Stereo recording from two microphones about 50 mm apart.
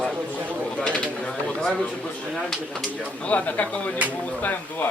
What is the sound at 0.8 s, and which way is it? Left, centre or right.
Speech, left.